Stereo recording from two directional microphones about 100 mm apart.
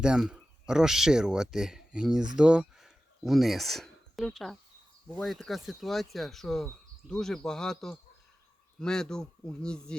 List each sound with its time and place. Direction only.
0.0 s a man's voice: 10° right (ahead or behind); by 10.0 s 10° left (ahead or behind)